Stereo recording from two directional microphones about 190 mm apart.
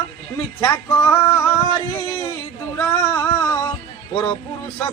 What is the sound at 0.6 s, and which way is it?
Speech, 15° left (ahead or behind).